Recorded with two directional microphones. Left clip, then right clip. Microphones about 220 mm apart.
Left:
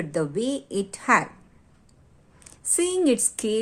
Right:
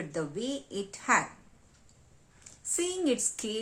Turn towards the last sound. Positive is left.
turn(degrees=35)  # may be behind; listen again after turning